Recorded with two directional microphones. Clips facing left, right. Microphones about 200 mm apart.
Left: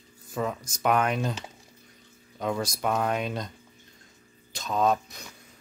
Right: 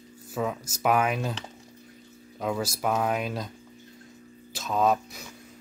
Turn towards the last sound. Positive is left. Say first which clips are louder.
# right 1 dB
turn(degrees=-5)  # may be behind; listen again after turning